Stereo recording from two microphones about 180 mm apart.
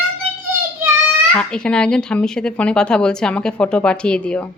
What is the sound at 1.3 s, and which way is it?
Speech, 5° left (ahead or behind).